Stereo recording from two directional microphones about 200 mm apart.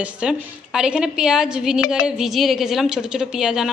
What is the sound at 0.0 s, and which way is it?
A woman's voice, 5° right (ahead or behind).